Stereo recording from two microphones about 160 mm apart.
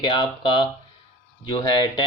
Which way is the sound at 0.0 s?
30° left (ahead or behind).